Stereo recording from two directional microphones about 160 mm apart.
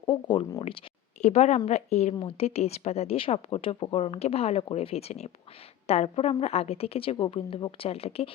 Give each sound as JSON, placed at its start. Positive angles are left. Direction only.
{"t": 0.0, "sound": "speech", "side_deg": 30}
{"t": 1.2, "sound": "a woman's voice", "side_deg": 45}